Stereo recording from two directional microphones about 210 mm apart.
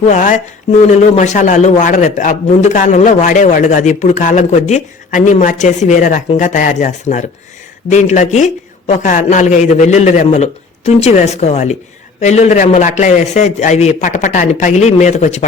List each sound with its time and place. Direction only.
0.0 s a man's voice: 35° left (ahead or behind)